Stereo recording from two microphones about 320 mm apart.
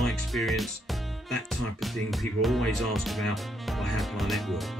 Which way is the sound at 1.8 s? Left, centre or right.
Centre.